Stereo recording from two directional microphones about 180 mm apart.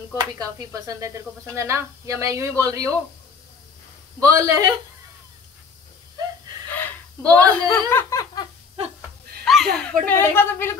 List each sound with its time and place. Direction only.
0.2 s speech: 20° right (ahead or behind)
4.2 s a man's voice: 20° right (ahead or behind)
6.8 s whimper: 10° left (ahead or behind)
7.9 s a sound: 15° left (ahead or behind)
9.4 s a sound: centre (ahead or behind)
10.0 s speech: 10° left (ahead or behind)